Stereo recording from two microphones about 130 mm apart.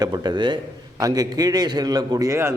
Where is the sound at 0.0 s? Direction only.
35° right (ahead or behind).